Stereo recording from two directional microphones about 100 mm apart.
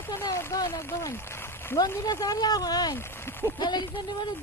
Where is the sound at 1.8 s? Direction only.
40° left (ahead or behind).